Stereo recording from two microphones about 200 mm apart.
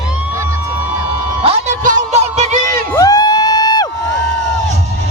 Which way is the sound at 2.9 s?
20° left (ahead or behind).